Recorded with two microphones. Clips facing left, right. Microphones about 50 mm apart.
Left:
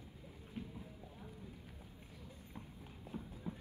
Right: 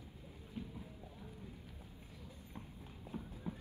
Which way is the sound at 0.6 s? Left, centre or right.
Left.